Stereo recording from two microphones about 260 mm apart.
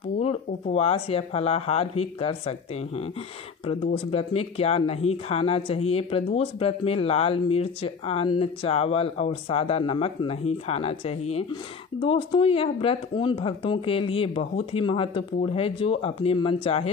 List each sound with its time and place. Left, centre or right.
0.2 s speech: left
3.6 s speech: left